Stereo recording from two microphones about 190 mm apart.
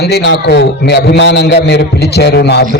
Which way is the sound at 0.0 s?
65° left (ahead or behind).